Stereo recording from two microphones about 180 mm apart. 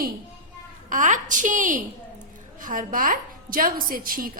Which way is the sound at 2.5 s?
50° right (ahead or behind).